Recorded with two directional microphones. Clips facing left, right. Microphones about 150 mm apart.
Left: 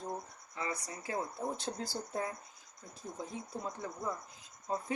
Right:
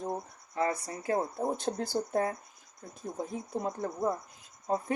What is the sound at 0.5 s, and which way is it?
Speech, 55° right (ahead or behind).